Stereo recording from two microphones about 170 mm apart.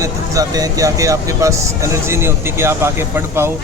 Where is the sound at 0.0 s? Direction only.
20° right (ahead or behind).